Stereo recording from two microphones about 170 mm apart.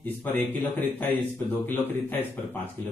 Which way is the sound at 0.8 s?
10° left (ahead or behind).